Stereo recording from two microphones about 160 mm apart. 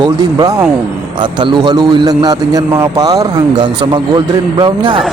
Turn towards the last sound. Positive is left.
turn(degrees=-30)  # may be behind; listen again after turning